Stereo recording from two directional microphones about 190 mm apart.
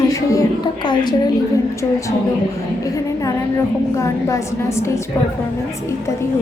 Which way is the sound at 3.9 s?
15° left (ahead or behind).